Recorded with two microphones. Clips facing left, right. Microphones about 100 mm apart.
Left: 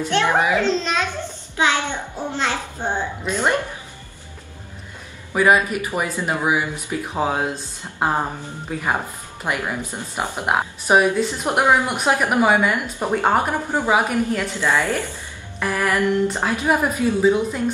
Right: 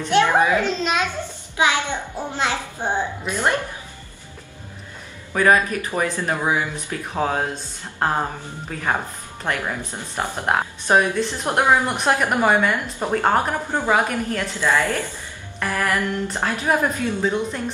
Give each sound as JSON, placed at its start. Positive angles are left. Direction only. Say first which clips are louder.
{"t": 0.1, "sound": "a child's voice", "louder": "right 3 dB", "side_deg": -15}
{"t": 0.4, "sound": "a child's voice", "louder": "even", "side_deg": 20}
{"t": 1.6, "sound": "a child's voice", "louder": "even", "side_deg": -15}
{"t": 5.3, "sound": "speech", "louder": "left 1 dB", "side_deg": 10}
{"t": 15.6, "sound": "music", "louder": "left 2 dB", "side_deg": 5}
{"t": 16.3, "sound": "speech", "louder": "left 1 dB", "side_deg": 10}